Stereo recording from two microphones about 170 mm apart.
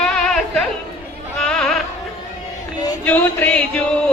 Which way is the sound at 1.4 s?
5° left (ahead or behind).